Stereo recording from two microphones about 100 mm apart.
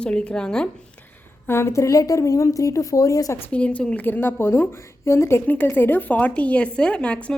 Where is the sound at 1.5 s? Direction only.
25° left (ahead or behind).